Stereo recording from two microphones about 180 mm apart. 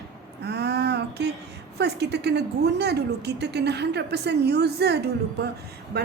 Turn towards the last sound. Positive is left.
turn(degrees=-65)  # may be behind; listen again after turning